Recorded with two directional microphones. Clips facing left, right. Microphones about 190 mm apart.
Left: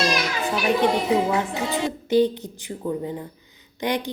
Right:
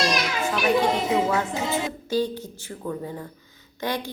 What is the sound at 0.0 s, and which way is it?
Children playing, centre (ahead or behind).